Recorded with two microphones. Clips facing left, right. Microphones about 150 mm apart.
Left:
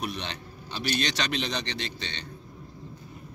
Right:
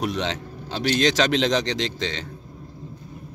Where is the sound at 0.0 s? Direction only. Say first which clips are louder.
Right 8 dB; 70° right (ahead or behind).